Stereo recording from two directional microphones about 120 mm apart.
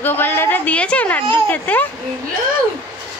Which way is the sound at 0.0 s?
15° left (ahead or behind).